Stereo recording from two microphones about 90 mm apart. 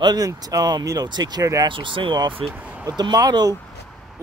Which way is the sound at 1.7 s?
65° right (ahead or behind).